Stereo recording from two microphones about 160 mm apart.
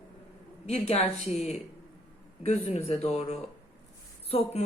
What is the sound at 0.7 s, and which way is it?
Speech, 40° left (ahead or behind).